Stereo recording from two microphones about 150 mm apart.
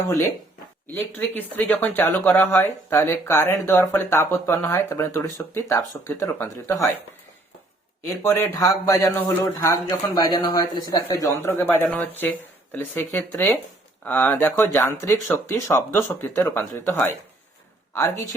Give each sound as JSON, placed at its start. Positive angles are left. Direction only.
{"t": 0.9, "sound": "speech", "side_deg": 15}
{"t": 8.0, "sound": "speech", "side_deg": 20}